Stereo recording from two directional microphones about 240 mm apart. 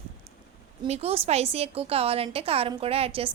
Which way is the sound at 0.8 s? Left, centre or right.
Right.